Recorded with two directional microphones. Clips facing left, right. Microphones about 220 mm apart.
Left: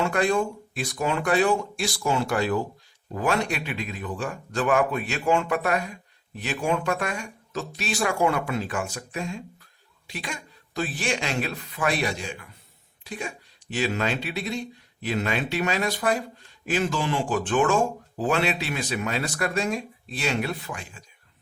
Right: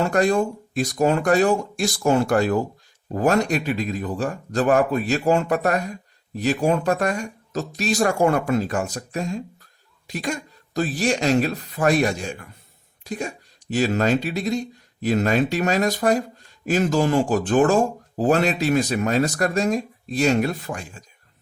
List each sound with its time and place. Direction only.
0.0 s speech: 40° right (ahead or behind)